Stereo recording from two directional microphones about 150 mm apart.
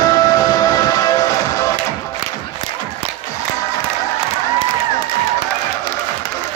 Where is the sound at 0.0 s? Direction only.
25° left (ahead or behind).